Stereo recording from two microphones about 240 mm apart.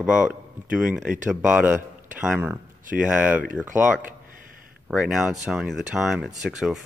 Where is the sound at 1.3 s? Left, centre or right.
Centre.